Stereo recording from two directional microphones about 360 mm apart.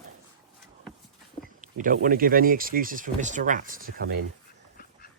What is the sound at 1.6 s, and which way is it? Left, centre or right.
Speech, right.